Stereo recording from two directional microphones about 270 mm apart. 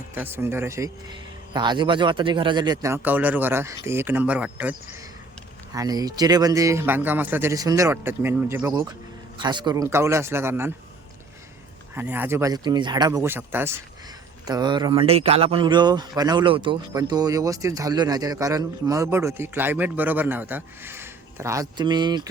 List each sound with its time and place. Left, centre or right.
0.1 s speech: centre
5.7 s speech: centre
11.9 s speech: centre